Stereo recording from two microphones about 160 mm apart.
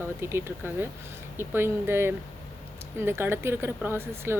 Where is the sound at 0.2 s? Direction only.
15° right (ahead or behind).